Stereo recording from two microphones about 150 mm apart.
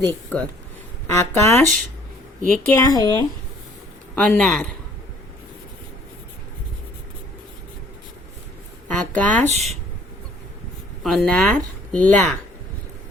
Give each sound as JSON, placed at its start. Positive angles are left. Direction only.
{"t": 0.0, "sound": "speech", "side_deg": 10}
{"t": 2.6, "sound": "speech", "side_deg": 20}
{"t": 4.1, "sound": "speech", "side_deg": 10}
{"t": 9.0, "sound": "speech", "side_deg": 10}
{"t": 9.5, "sound": "speech", "side_deg": -45}
{"t": 11.0, "sound": "speech", "side_deg": 5}